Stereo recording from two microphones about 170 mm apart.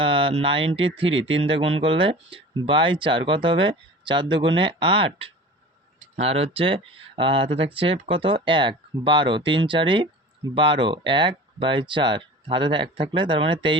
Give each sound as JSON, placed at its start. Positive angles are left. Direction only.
{"t": 0.0, "sound": "speech", "side_deg": -35}